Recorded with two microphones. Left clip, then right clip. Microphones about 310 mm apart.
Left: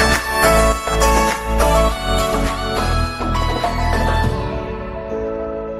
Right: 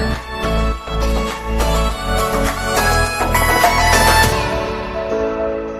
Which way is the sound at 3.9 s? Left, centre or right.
Right.